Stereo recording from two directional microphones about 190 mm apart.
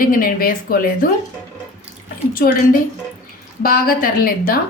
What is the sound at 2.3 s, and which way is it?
A woman's voice, 50° left (ahead or behind).